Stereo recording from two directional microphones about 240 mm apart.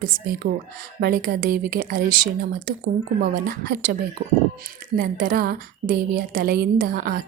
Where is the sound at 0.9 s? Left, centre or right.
Right.